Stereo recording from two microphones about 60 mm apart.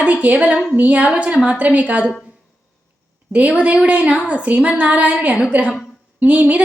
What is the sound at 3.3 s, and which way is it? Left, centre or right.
A woman's voice, right.